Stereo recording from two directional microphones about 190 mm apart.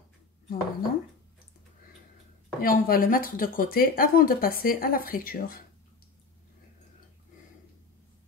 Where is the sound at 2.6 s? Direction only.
50° left (ahead or behind).